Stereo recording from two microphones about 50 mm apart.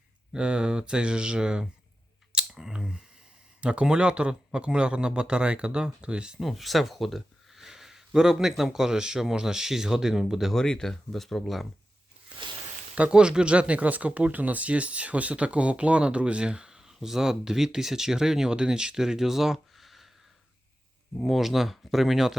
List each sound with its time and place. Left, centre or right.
0.3 s speech: centre
2.3 s clicking: centre
3.6 s speech: right
6.4 s speech: centre
10.5 s speech: centre
13.0 s speech: centre
21.2 s speech: centre